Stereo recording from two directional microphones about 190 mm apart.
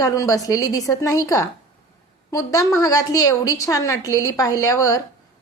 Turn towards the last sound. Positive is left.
turn(degrees=15)  # may be behind; listen again after turning